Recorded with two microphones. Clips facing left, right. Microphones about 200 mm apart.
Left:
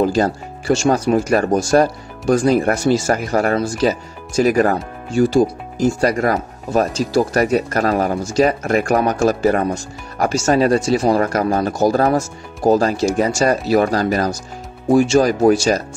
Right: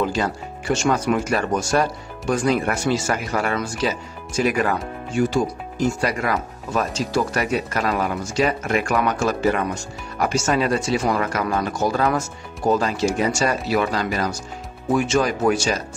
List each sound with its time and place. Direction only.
0.0 s speech: 40° left (ahead or behind)